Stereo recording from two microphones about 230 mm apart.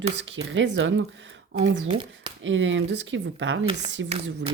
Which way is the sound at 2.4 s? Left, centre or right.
Right.